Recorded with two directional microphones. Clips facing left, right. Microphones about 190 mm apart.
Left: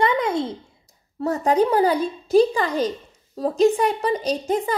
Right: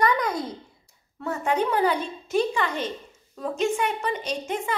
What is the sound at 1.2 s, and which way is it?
A child's voice, 40° left (ahead or behind).